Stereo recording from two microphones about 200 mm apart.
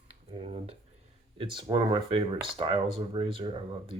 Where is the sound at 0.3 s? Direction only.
30° right (ahead or behind).